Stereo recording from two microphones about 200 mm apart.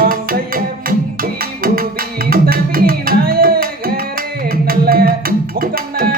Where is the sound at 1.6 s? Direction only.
45° right (ahead or behind).